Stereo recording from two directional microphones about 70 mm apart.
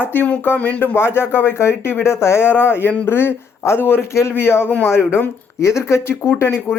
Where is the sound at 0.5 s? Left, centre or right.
Left.